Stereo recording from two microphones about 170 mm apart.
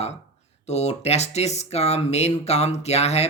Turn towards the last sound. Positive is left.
turn(degrees=40)  # may be behind; listen again after turning